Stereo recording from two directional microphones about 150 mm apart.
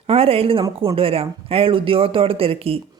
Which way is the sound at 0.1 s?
40° right (ahead or behind).